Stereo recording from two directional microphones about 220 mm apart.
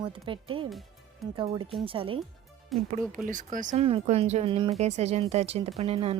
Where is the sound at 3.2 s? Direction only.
35° right (ahead or behind).